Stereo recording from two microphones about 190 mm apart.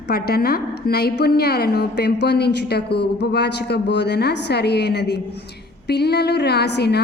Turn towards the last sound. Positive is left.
turn(degrees=60)  # may be behind; listen again after turning